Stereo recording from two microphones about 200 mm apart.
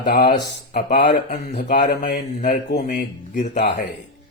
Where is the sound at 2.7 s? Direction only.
55° left (ahead or behind).